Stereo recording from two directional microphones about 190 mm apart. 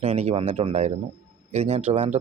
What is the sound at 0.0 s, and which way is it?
Speech, 35° right (ahead or behind).